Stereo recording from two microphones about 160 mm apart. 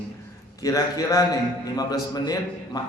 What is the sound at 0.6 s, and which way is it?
A man's voice, 20° left (ahead or behind).